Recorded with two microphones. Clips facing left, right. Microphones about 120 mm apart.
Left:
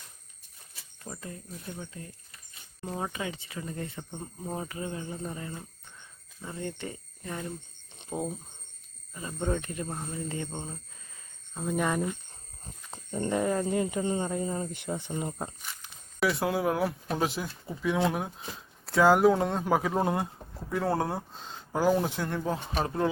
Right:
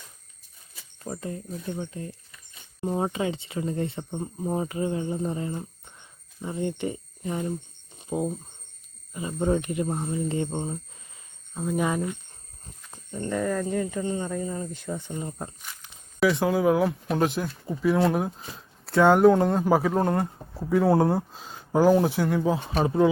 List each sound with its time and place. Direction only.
1.0 s speech: 30° right (ahead or behind)
7.9 s speech: 5° right (ahead or behind); by 10.7 s 30° right (ahead or behind)
11.5 s speech: centre (ahead or behind)
12.9 s speech: 25° left (ahead or behind); by 13.8 s 10° left (ahead or behind)
13.8 s speech: 20° left (ahead or behind)
15.6 s speech: centre (ahead or behind)
20.7 s speech: 5° right (ahead or behind)